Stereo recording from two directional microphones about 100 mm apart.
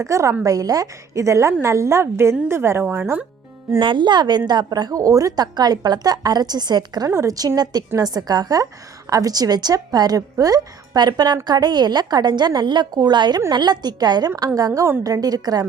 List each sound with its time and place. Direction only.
0.0 s a woman's voice: 30° right (ahead or behind)
3.8 s a woman's voice: 55° right (ahead or behind)
7.1 s a woman's voice: 30° right (ahead or behind)
14.7 s a woman's voice: 25° right (ahead or behind); by 15.6 s 40° right (ahead or behind)